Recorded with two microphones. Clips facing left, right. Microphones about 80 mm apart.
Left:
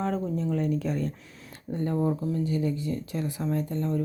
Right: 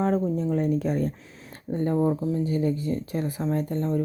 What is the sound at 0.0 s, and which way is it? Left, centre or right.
Speech, right.